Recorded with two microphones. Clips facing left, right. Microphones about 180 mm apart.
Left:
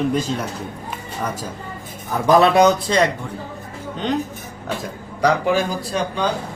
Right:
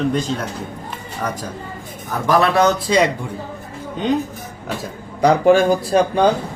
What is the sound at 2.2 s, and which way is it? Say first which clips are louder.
Speech: left 2 dB; 20° left (ahead or behind).